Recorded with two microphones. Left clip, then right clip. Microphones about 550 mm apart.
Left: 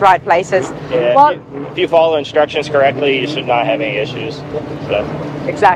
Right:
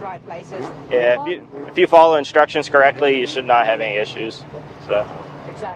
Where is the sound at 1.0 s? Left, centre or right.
Right.